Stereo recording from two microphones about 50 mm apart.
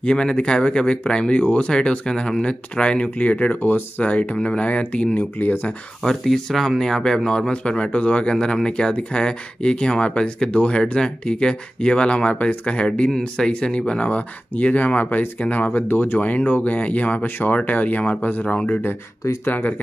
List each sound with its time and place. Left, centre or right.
0.0 s speech: centre
1.4 s speech: left
1.7 s speech: centre
5.4 s speech: left
6.0 s speech: centre; by 16.3 s left
16.3 s speech: left